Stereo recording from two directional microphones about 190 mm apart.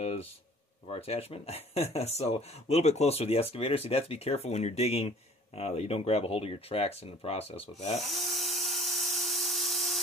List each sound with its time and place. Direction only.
0.8 s speech: 30° left (ahead or behind)
8.0 s dental drill: centre (ahead or behind)